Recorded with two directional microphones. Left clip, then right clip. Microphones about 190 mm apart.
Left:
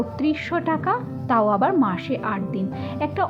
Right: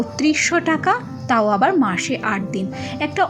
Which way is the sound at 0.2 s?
15° right (ahead or behind).